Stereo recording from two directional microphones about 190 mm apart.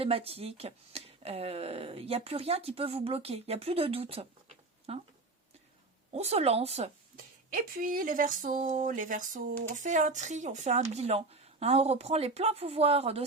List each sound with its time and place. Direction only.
0.0 s speech: 30° right (ahead or behind)
6.1 s speech: 35° right (ahead or behind)
7.5 s a woman's voice: 50° right (ahead or behind); by 13.2 s 30° right (ahead or behind)